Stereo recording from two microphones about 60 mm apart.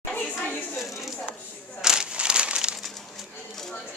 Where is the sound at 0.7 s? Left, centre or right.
Centre.